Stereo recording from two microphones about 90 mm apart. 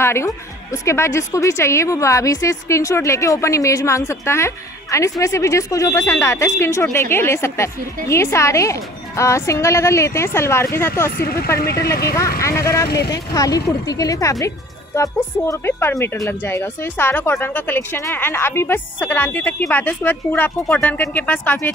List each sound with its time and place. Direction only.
0.0 s speech: 30° left (ahead or behind)
15.4 s speech: 30° left (ahead or behind)